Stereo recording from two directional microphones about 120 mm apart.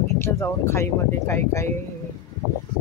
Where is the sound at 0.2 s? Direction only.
20° left (ahead or behind).